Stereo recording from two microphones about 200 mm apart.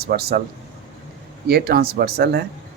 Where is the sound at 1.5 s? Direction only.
50° right (ahead or behind).